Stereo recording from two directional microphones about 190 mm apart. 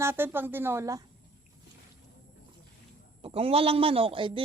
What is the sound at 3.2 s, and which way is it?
Speech, 30° right (ahead or behind).